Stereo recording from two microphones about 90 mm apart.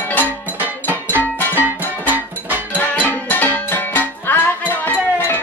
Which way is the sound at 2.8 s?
20° left (ahead or behind).